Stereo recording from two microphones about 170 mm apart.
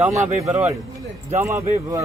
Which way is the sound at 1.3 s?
15° right (ahead or behind).